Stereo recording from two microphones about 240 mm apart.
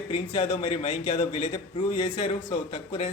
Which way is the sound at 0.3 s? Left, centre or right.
Left.